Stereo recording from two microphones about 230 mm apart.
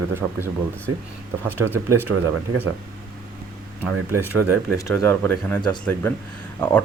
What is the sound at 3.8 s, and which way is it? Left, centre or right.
Speech, centre.